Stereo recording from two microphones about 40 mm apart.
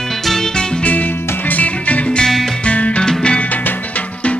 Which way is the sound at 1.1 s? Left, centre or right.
Left.